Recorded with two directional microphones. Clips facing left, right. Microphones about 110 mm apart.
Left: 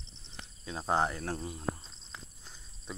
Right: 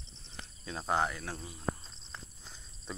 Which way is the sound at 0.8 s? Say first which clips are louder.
Left 2 dB; 30° left (ahead or behind).